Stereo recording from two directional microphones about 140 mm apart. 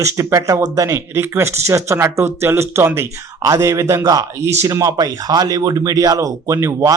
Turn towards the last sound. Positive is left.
turn(degrees=-20)  # may be behind; listen again after turning